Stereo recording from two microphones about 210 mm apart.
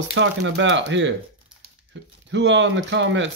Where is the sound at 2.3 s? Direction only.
60° right (ahead or behind).